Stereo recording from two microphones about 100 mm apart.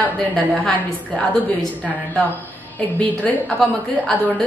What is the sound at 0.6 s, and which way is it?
A woman's voice, 15° left (ahead or behind).